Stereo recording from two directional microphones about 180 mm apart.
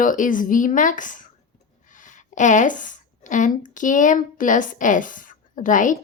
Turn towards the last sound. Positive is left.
turn(degrees=45)  # may be behind; listen again after turning